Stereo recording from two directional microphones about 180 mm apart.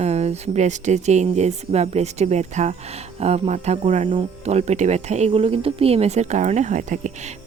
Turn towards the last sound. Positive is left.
turn(degrees=-40)  # may be behind; listen again after turning